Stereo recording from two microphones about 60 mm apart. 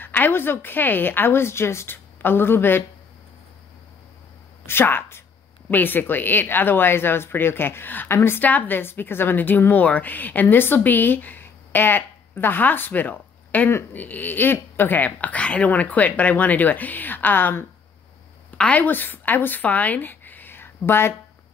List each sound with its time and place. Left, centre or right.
0.0 s a woman's voice: left
4.6 s a woman's voice: left
8.5 s a woman's voice: left
18.6 s speech: left
18.9 s speech: left